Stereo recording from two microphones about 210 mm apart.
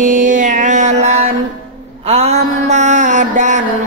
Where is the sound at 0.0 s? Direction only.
35° right (ahead or behind).